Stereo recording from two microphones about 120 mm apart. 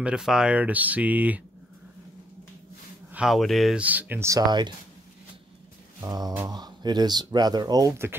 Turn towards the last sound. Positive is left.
turn(degrees=-35)  # may be behind; listen again after turning